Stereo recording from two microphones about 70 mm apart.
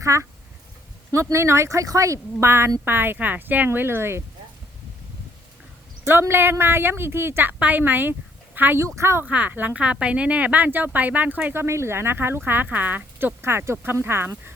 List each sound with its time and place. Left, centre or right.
0.0 s speech: right
6.1 s speech: right
7.6 s speech: right
8.8 s speech: right
9.2 s speech: centre
11.5 s speech: right